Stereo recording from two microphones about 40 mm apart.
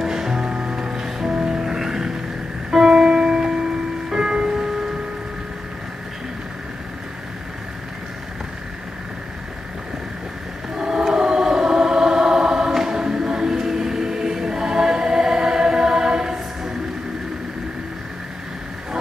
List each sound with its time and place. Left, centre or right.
0.0 s music: centre
10.8 s choir: centre